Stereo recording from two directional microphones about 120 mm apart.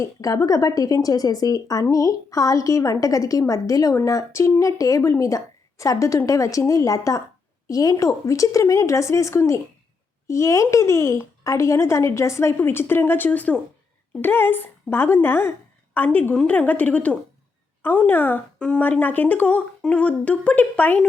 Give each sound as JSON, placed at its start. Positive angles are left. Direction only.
{"t": 0.0, "sound": "a woman's voice", "side_deg": 25}